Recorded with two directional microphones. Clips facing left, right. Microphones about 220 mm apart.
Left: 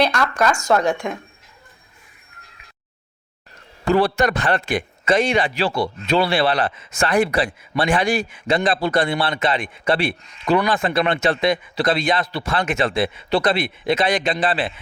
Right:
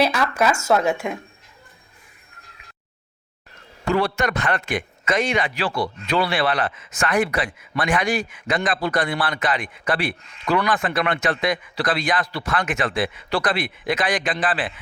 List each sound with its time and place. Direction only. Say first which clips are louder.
0.0 s speech: left 1 dB; 5° right (ahead or behind)
3.8 s a man's voice: left 4 dB; 35° left (ahead or behind)